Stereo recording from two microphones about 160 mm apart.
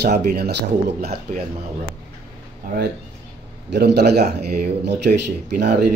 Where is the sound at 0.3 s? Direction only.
80° right.